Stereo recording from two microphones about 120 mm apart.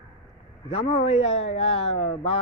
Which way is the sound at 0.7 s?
55° left (ahead or behind).